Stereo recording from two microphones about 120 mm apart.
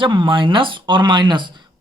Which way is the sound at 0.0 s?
45° right (ahead or behind).